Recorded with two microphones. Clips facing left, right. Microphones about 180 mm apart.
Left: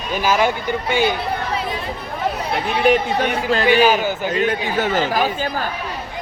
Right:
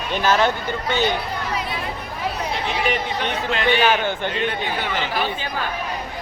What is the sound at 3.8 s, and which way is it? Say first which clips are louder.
Speech: left 3 dB; 5° left (ahead or behind).